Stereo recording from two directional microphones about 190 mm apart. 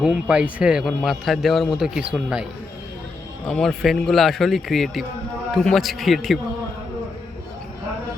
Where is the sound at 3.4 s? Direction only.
5° left (ahead or behind).